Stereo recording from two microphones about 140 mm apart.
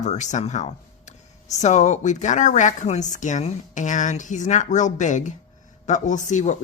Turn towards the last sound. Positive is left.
turn(degrees=60)  # may be behind; listen again after turning